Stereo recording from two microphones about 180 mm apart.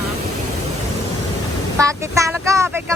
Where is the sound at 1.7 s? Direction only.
15° right (ahead or behind).